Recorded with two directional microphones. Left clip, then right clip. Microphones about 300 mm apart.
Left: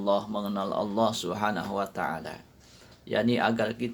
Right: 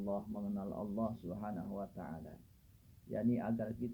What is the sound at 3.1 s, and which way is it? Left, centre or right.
Speech, centre.